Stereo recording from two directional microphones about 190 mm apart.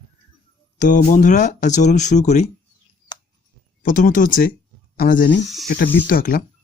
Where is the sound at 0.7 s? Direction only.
40° left (ahead or behind).